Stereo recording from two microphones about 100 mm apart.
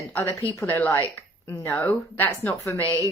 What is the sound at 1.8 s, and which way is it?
Speech, 15° left (ahead or behind).